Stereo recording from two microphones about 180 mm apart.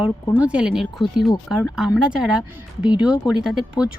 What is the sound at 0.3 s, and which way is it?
Speech, 5° right (ahead or behind).